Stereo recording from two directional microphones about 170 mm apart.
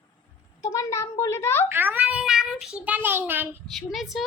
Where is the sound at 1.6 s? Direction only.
10° right (ahead or behind).